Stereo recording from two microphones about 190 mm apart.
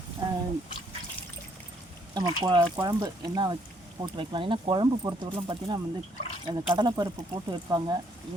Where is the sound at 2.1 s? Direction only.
20° right (ahead or behind).